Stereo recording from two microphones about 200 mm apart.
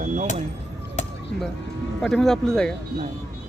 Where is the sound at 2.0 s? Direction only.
Centre (ahead or behind).